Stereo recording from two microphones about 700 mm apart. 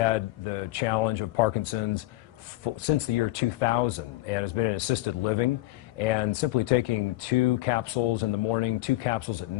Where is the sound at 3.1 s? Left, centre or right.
Left.